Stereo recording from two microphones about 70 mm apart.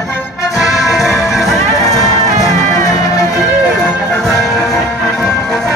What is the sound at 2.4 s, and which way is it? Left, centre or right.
Music, left.